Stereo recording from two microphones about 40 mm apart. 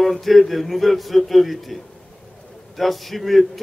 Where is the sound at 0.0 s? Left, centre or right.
Centre.